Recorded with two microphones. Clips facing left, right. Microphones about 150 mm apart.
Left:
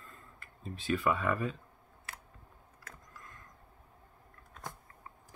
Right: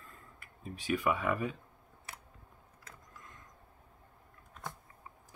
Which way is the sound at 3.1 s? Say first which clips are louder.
Left 1 dB; 20° right (ahead or behind).